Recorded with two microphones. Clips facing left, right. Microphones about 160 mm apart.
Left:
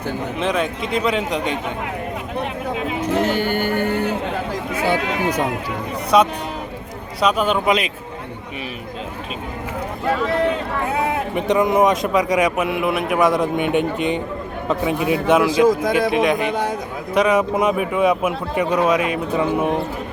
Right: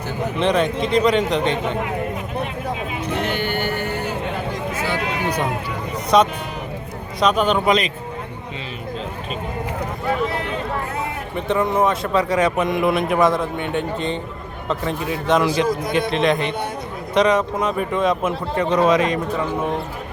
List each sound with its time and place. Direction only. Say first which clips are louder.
0.3 s a man's voice: right 4 dB; 5° left (ahead or behind)
3.0 s a sound: left 5 dB; 45° left (ahead or behind)
4.7 s speech: left 6 dB; 60° left (ahead or behind)
6.1 s a man's voice: even; 5° left (ahead or behind)
10.9 s a sound: left 6 dB; 90° left
11.3 s a man's voice: left 2 dB; 15° left (ahead or behind)
15.5 s a man's voice: left 5 dB; 90° left
16.0 s a man's voice: left 2 dB; 10° left (ahead or behind)